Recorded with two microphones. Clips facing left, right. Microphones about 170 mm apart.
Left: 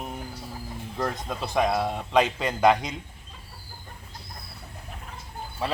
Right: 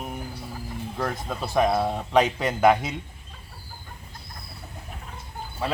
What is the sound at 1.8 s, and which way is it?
Speech, 10° right (ahead or behind).